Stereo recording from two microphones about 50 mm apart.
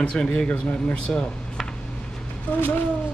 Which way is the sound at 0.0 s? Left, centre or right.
Centre.